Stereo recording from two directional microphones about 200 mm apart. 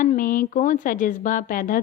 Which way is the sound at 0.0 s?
40° left (ahead or behind).